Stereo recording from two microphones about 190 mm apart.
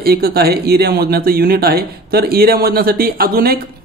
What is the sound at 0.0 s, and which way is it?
Speech, 55° right (ahead or behind).